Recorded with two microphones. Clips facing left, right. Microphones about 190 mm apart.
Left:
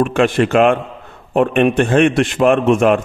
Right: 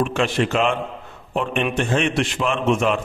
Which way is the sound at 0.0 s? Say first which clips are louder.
Left 6 dB; 55° left (ahead or behind).